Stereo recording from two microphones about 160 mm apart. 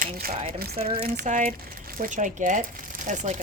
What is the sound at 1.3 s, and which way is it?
Speech, 50° right (ahead or behind).